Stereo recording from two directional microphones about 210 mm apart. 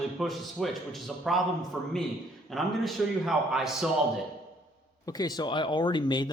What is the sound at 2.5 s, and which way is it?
Speech, centre (ahead or behind).